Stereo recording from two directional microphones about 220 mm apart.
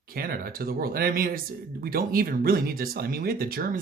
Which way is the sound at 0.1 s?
40° right (ahead or behind).